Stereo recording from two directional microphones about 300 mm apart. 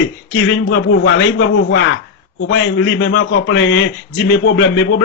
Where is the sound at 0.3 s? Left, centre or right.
Left.